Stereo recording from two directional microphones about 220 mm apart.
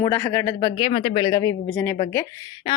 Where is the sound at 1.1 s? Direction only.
15° left (ahead or behind).